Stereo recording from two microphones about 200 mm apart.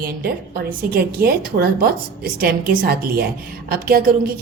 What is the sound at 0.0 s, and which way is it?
A woman's voice, 50° right (ahead or behind).